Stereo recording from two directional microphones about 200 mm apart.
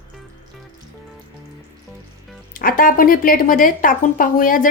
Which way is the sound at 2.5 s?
45° left (ahead or behind).